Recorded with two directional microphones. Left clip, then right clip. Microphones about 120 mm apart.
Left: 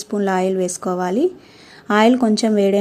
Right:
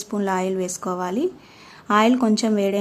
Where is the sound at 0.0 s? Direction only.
25° left (ahead or behind).